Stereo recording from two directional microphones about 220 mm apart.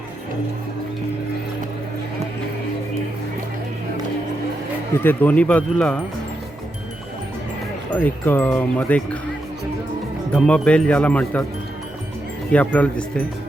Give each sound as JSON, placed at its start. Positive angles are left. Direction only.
{"t": 4.9, "sound": "speech", "side_deg": 10}
{"t": 8.0, "sound": "speech", "side_deg": 10}
{"t": 10.3, "sound": "speech", "side_deg": 5}
{"t": 12.5, "sound": "speech", "side_deg": 5}